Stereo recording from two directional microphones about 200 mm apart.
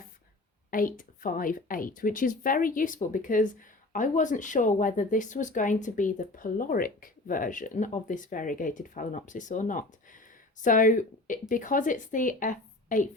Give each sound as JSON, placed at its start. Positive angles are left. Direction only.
{"t": 0.7, "sound": "a woman's voice", "side_deg": 45}